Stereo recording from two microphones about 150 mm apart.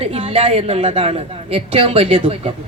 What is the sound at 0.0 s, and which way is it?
A woman's voice, 40° right (ahead or behind).